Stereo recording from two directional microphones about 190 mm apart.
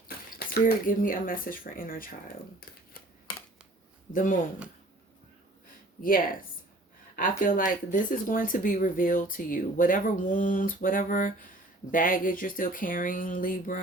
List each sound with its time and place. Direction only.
0.3 s speech: 50° left (ahead or behind)
4.1 s speech: 45° left (ahead or behind)
6.0 s speech: 50° left (ahead or behind)